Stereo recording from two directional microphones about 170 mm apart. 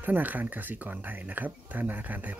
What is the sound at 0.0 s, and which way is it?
Speech, 10° right (ahead or behind).